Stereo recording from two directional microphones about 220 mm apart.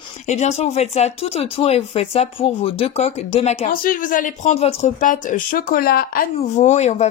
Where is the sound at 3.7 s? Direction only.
40° left (ahead or behind).